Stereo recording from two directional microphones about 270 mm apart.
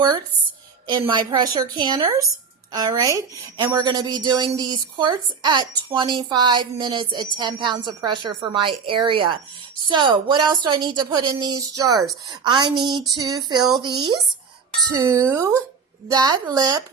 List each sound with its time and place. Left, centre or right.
0.9 s a woman's voice: centre